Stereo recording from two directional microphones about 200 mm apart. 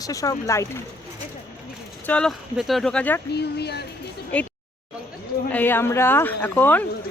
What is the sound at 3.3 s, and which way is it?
Speech, 55° left (ahead or behind).